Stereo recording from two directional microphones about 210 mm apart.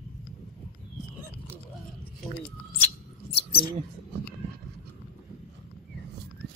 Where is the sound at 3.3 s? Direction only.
50° left (ahead or behind).